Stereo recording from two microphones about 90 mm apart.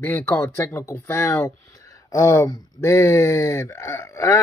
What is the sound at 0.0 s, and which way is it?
Speech, 30° left (ahead or behind).